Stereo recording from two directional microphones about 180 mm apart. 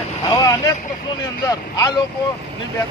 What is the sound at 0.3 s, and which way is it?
Vehicle, 20° left (ahead or behind).